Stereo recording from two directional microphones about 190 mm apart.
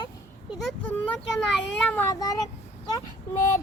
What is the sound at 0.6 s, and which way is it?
A child's voice, 5° left (ahead or behind).